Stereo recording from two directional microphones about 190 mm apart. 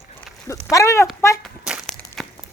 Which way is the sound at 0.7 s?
15° left (ahead or behind).